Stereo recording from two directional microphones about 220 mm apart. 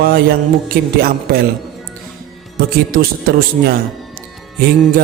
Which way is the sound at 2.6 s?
45° right (ahead or behind).